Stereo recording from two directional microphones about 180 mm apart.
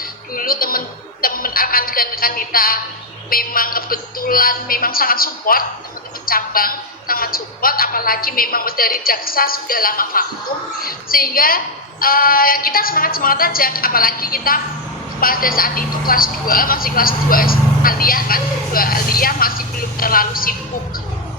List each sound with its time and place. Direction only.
0.3 s music: 55° left (ahead or behind)
1.2 s speech: 55° left (ahead or behind)